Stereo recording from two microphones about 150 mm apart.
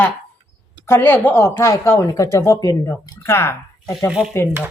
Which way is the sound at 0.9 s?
15° left (ahead or behind).